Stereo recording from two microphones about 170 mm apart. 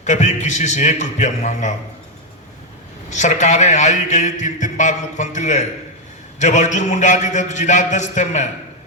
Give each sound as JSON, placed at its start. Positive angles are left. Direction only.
{"t": 0.0, "sound": "a man's voice", "side_deg": 45}
{"t": 3.1, "sound": "a man's voice", "side_deg": 45}